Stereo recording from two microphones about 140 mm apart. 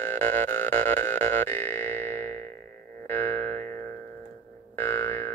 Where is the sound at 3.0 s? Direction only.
15° left (ahead or behind).